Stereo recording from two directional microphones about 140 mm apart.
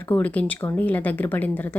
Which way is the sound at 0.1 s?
10° left (ahead or behind).